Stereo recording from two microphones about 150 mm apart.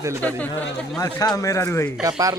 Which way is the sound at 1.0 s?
25° left (ahead or behind).